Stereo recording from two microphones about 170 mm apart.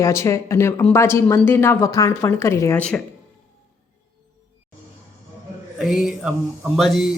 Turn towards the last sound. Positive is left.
turn(degrees=0)  # may be behind; listen again after turning